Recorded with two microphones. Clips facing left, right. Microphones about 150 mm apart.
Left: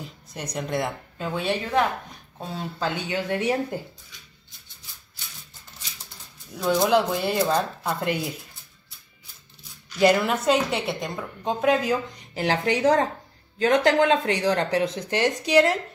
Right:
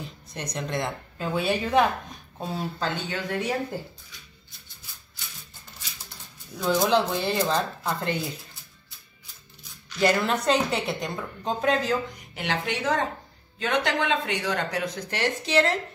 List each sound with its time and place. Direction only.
0.0 s speech: 5° left (ahead or behind)
1.1 s speech: 5° right (ahead or behind)
2.8 s a woman's voice: 15° left (ahead or behind)
6.6 s a woman's voice: 5° left (ahead or behind)
9.9 s a woman's voice: 15° left (ahead or behind)
12.4 s speech: 35° left (ahead or behind); by 15.8 s 15° left (ahead or behind)